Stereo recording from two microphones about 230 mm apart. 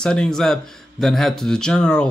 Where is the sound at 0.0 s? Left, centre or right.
Centre.